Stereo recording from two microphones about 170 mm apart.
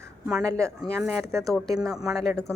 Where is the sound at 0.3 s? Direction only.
Centre (ahead or behind).